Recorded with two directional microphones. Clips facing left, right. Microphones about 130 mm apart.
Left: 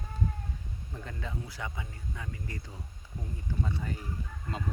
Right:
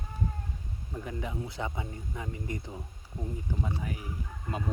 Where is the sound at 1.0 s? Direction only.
15° right (ahead or behind).